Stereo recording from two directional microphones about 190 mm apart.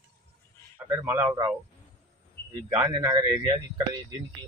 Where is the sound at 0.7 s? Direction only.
15° right (ahead or behind).